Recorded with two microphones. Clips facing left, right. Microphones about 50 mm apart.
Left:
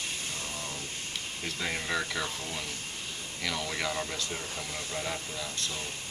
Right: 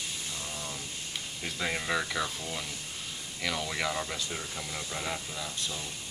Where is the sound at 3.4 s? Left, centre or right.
Centre.